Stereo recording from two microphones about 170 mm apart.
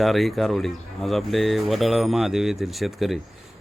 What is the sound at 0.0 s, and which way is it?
Speech, centre (ahead or behind).